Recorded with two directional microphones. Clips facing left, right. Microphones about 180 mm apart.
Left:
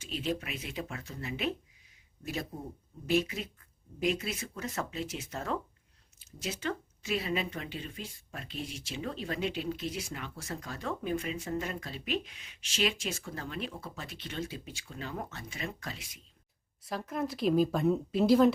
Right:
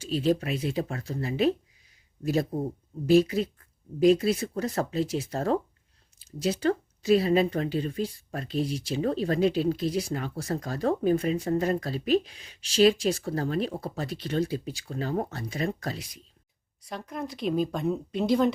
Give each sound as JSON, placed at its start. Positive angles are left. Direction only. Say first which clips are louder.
{"t": 0.0, "sound": "speech", "louder": "right 9 dB", "side_deg": -35}
{"t": 16.8, "sound": "speech", "louder": "left 1 dB", "side_deg": 0}